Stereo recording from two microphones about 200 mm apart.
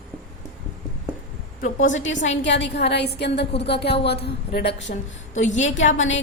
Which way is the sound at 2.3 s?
60° left (ahead or behind).